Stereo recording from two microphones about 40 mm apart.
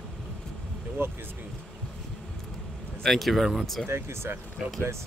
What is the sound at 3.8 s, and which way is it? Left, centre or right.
Speech, right.